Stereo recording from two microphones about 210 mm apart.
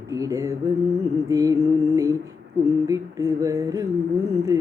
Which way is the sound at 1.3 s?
15° right (ahead or behind).